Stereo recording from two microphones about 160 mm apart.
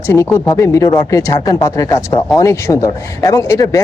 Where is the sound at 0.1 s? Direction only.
15° left (ahead or behind).